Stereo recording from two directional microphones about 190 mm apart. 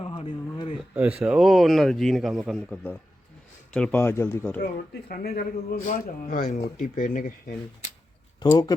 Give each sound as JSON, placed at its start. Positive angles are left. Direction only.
{"t": 0.0, "sound": "a sound", "side_deg": 30}
{"t": 1.2, "sound": "a man's voice", "side_deg": -5}
{"t": 5.0, "sound": "a man's voice", "side_deg": 55}
{"t": 8.4, "sound": "speech", "side_deg": 20}